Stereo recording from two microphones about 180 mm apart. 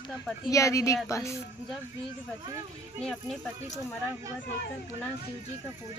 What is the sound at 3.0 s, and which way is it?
Speech, 5° left (ahead or behind).